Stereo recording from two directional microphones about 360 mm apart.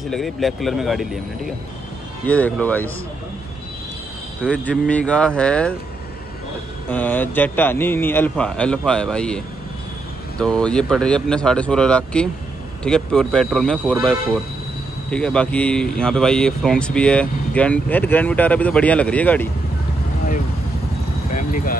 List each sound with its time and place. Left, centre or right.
0.1 s speech: centre
2.2 s speech: centre
4.4 s speech: centre
6.9 s speech: centre
10.4 s speech: centre
21.3 s vehicle: left